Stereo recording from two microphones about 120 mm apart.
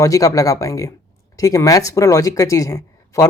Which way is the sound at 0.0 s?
30° left (ahead or behind).